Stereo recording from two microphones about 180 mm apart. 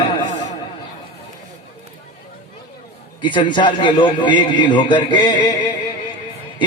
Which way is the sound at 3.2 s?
25° left (ahead or behind).